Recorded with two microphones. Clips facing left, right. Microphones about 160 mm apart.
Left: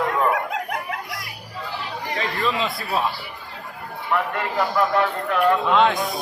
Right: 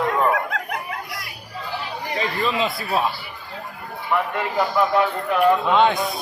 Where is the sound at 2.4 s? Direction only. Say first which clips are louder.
Right 1 dB; centre (ahead or behind).